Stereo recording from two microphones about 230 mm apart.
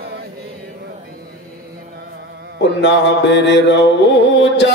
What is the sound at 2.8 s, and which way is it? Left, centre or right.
Mantra, left.